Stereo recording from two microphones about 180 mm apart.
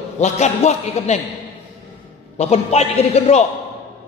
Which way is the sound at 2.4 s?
35° left (ahead or behind).